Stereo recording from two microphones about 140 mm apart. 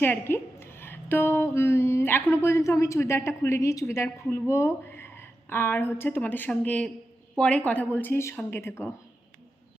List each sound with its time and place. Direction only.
0.0 s a woman's voice: 15° left (ahead or behind)